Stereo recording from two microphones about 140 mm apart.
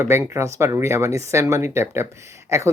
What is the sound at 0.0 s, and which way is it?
Speech, 20° right (ahead or behind).